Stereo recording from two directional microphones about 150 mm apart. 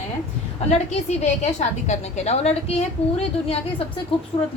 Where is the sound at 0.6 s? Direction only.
45° left (ahead or behind).